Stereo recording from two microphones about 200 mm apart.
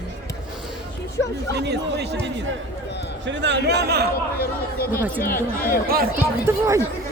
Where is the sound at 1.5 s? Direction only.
55° right (ahead or behind).